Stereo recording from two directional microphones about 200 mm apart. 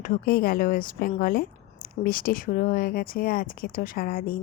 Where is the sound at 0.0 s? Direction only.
45° left (ahead or behind).